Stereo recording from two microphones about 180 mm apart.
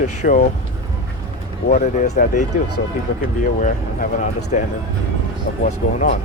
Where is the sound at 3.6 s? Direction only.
45° left (ahead or behind).